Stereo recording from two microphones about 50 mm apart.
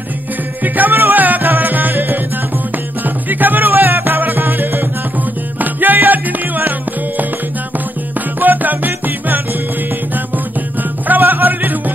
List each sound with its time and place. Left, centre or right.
0.7 s music: right
3.3 s music: right
8.4 s music: right